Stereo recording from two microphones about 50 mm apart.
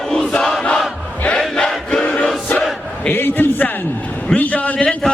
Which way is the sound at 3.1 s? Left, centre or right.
Left.